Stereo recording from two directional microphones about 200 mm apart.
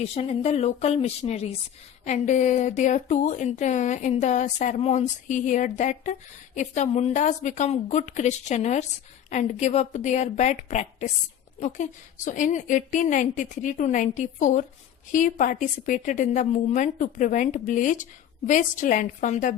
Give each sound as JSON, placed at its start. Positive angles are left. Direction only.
{"t": 0.0, "sound": "speech", "side_deg": 30}